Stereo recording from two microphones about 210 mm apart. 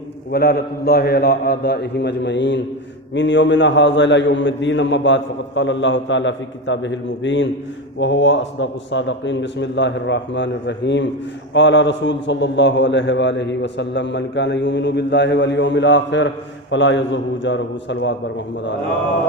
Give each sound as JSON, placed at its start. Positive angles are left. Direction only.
{"t": 0.3, "sound": "a man's voice", "side_deg": 50}